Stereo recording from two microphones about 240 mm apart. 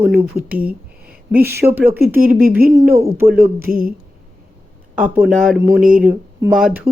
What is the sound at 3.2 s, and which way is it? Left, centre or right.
Speech, right.